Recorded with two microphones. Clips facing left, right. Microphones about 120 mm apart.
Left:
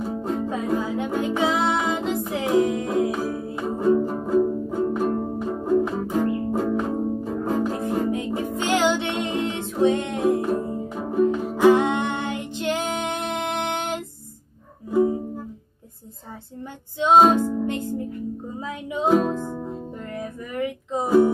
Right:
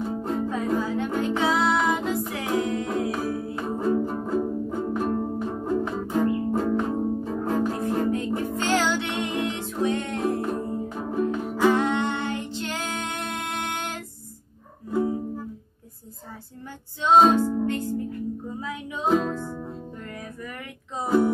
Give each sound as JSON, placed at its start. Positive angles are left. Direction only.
{"t": 0.0, "sound": "music", "side_deg": 5}
{"t": 0.5, "sound": "music", "side_deg": 15}
{"t": 3.6, "sound": "music", "side_deg": 0}
{"t": 10.5, "sound": "music", "side_deg": 5}
{"t": 11.2, "sound": "music", "side_deg": 20}
{"t": 17.0, "sound": "music", "side_deg": 15}